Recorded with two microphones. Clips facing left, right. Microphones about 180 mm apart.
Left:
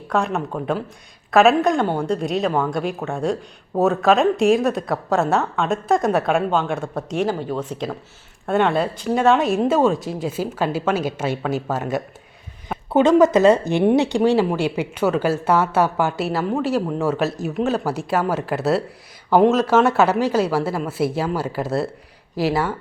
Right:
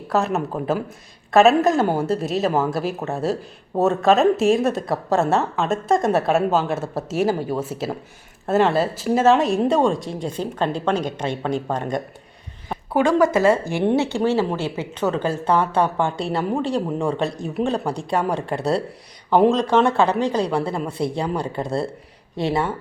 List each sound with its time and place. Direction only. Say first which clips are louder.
0.1 s speech: right 1 dB; centre (ahead or behind)
12.9 s speech: left 3 dB; 20° left (ahead or behind); by 22.7 s centre (ahead or behind)